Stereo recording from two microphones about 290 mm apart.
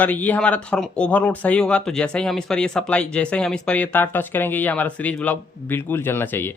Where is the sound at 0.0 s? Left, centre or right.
Centre.